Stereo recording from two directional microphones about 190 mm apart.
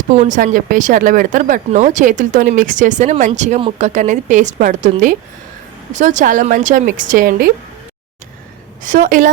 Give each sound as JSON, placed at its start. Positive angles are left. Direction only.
{"t": 0.2, "sound": "speech", "side_deg": -40}
{"t": 8.8, "sound": "speech", "side_deg": -45}